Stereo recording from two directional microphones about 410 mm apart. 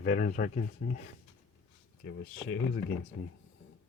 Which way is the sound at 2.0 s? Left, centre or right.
Left.